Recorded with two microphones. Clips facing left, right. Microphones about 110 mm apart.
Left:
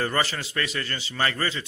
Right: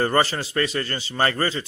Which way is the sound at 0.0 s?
35° right (ahead or behind).